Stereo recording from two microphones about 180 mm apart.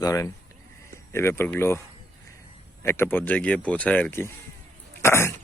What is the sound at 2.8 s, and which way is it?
Speech, 15° left (ahead or behind).